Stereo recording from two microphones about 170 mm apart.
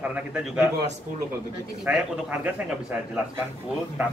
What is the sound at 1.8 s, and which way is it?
A man's voice, 10° right (ahead or behind).